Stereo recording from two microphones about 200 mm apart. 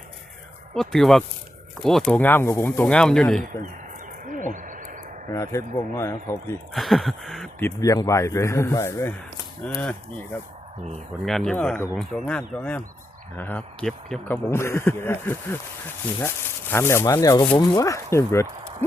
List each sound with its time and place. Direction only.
0.7 s speech: centre (ahead or behind)
4.5 s a sound: 40° right (ahead or behind)
5.3 s speech: 15° left (ahead or behind)
6.7 s speech: centre (ahead or behind)
7.8 s speech: 15° left (ahead or behind)
11.3 s speech: 5° left (ahead or behind)